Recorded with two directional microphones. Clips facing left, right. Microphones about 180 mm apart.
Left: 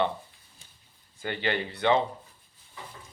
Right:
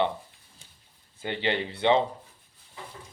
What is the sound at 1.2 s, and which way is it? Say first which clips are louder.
Speech: right 1 dB; 20° right (ahead or behind).